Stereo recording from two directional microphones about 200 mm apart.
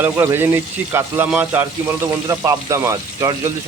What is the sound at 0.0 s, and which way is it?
Speech, 10° right (ahead or behind).